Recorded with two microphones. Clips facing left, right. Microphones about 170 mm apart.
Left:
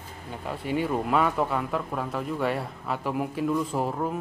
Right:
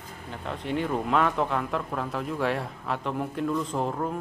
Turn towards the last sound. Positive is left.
turn(degrees=5)  # may be behind; listen again after turning